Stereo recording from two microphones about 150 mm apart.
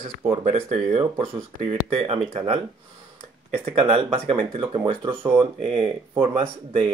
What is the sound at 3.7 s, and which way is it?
Speech, 40° right (ahead or behind).